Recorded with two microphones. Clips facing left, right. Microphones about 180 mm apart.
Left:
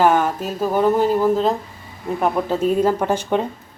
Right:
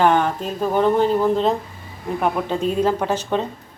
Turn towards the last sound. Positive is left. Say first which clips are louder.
# left 2 dB
turn(degrees=10)  # may be behind; listen again after turning